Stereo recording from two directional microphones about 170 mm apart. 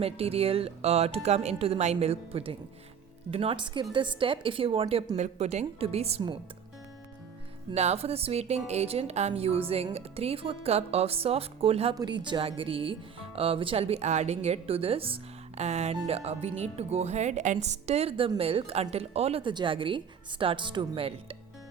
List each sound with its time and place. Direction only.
0.0 s speech: 35° right (ahead or behind)
7.7 s speech: 40° right (ahead or behind)